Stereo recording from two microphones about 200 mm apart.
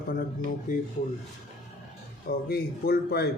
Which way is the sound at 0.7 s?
40° left (ahead or behind).